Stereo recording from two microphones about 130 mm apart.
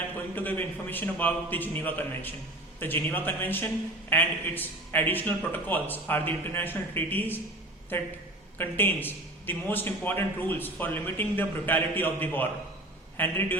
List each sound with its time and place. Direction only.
0.3 s a man's voice: 15° left (ahead or behind)